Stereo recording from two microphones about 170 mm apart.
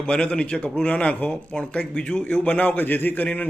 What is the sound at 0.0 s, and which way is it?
A man's voice, 5° left (ahead or behind).